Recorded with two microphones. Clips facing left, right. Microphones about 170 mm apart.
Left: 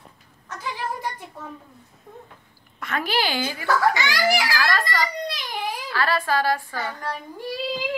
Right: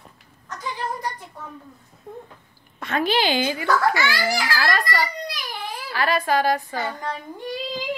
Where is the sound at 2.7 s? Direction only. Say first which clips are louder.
Right 3 dB; 25° right (ahead or behind).